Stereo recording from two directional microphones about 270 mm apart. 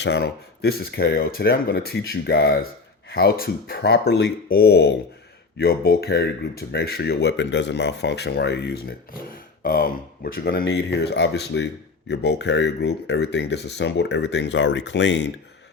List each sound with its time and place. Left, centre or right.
0.0 s speech: left